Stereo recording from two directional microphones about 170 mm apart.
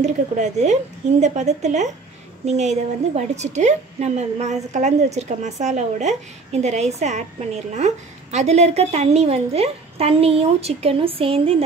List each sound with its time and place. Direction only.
0.0 s a woman's voice: 45° right (ahead or behind)